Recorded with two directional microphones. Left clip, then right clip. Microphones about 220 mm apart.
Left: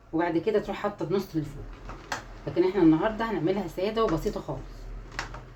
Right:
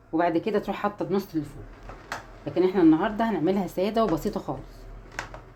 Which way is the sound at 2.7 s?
40° right (ahead or behind).